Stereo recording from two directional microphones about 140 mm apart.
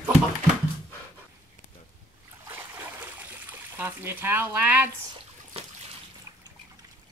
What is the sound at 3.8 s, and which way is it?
Speech, 15° right (ahead or behind).